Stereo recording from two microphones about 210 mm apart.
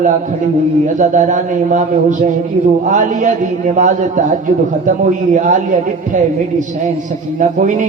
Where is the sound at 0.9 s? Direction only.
35° right (ahead or behind).